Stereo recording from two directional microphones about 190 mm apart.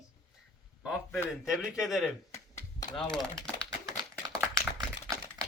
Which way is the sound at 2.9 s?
Centre (ahead or behind).